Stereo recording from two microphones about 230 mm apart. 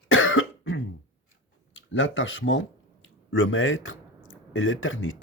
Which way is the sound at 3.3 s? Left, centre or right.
Left.